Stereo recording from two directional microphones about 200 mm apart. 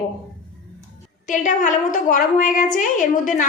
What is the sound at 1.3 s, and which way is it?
A woman's voice, 40° left (ahead or behind).